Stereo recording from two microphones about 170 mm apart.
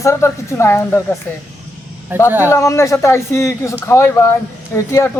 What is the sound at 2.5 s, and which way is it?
Speech, 15° left (ahead or behind).